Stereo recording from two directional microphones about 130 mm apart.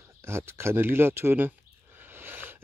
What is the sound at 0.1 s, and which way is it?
Speech, 20° right (ahead or behind).